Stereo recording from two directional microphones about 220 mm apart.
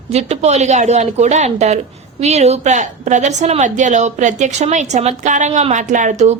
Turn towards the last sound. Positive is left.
turn(degrees=-35)  # may be behind; listen again after turning